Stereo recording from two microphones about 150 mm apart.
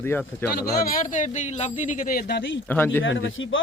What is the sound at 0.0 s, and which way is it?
Speech, 15° left (ahead or behind).